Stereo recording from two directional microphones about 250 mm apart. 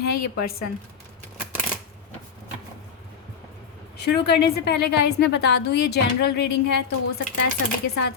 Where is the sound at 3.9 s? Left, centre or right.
Left.